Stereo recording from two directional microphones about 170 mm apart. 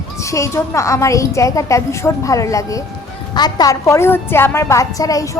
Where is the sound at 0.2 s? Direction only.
15° left (ahead or behind).